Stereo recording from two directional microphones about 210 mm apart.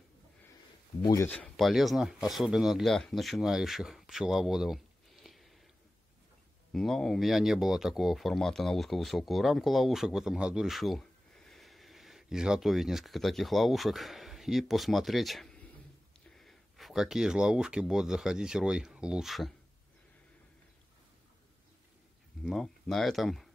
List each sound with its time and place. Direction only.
1.0 s speech: 15° left (ahead or behind)
1.3 s speech: 5° left (ahead or behind)
6.7 s speech: centre (ahead or behind)
22.4 s speech: centre (ahead or behind)